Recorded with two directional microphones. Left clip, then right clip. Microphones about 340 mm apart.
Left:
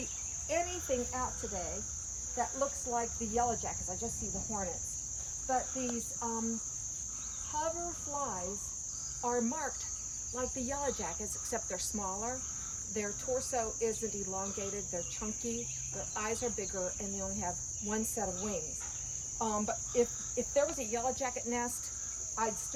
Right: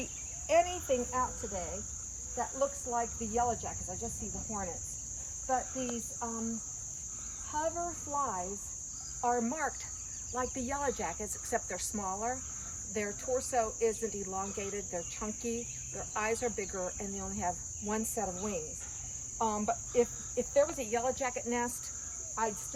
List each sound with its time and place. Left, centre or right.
0.5 s speech: centre
2.4 s cricket: centre
5.5 s cricket: centre
9.2 s cricket: centre
16.1 s cricket: centre
19.4 s cricket: centre